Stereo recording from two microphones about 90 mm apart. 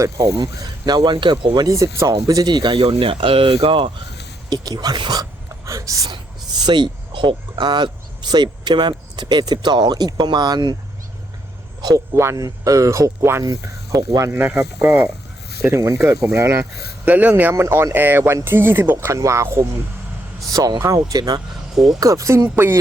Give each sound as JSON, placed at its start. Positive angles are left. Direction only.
{"t": 0.0, "sound": "speech", "side_deg": -35}
{"t": 1.6, "sound": "speech", "side_deg": -35}
{"t": 2.7, "sound": "speech", "side_deg": -85}
{"t": 4.4, "sound": "speech", "side_deg": -50}
{"t": 6.1, "sound": "speech", "side_deg": -50}
{"t": 11.8, "sound": "speech", "side_deg": -45}
{"t": 12.1, "sound": "speech", "side_deg": -30}
{"t": 13.4, "sound": "speech", "side_deg": -40}
{"t": 14.3, "sound": "speech", "side_deg": -25}
{"t": 17.1, "sound": "speech", "side_deg": -20}
{"t": 22.0, "sound": "speech", "side_deg": -35}